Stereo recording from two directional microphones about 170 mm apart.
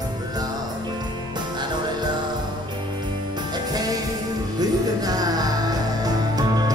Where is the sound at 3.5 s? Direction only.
20° right (ahead or behind).